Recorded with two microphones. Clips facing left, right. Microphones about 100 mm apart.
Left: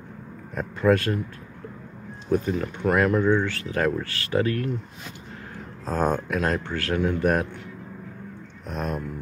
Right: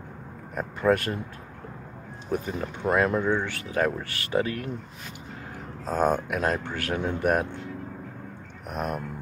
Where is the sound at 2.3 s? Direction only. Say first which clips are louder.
Left 5 dB; 10° right (ahead or behind).